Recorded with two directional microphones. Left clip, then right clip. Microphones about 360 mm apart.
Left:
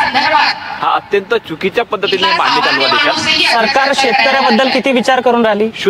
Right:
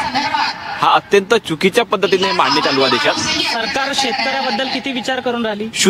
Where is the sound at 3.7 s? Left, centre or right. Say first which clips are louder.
Left 7 dB; centre.